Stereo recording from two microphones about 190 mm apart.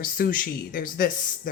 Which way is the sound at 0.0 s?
50° left (ahead or behind).